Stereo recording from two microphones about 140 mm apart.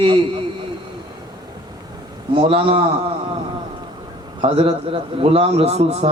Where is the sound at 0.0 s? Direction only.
40° right (ahead or behind).